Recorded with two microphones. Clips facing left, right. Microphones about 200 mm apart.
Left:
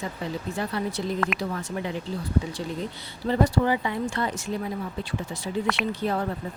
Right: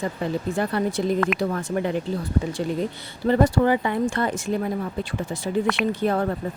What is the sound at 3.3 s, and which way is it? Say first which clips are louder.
Speech: right 4 dB; 55° right (ahead or behind).